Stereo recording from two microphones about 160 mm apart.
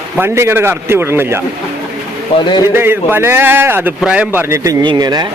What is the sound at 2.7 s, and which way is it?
A man's voice, 15° right (ahead or behind).